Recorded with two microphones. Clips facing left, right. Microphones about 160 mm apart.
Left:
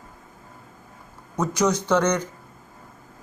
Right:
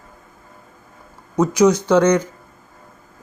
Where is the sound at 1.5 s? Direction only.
10° right (ahead or behind).